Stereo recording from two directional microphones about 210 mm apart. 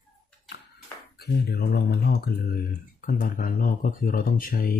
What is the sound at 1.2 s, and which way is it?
Speech, 50° left (ahead or behind).